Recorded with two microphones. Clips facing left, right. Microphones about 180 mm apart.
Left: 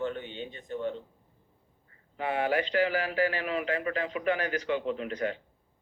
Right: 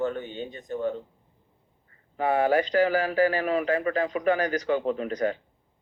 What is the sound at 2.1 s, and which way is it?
A man's voice, 45° right (ahead or behind).